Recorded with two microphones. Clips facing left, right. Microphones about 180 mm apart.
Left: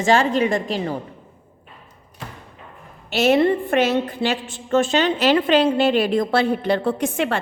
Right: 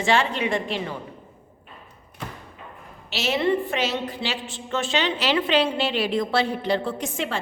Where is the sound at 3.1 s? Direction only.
50° left (ahead or behind).